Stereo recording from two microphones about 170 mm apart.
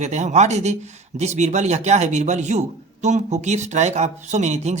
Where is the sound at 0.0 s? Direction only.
45° right (ahead or behind).